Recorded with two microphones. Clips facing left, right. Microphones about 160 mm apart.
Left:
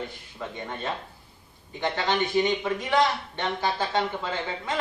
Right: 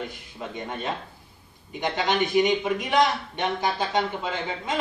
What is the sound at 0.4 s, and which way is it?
A man's voice, 15° right (ahead or behind).